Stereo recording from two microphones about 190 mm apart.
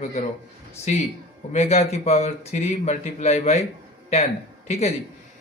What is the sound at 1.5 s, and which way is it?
Speech, 35° left (ahead or behind).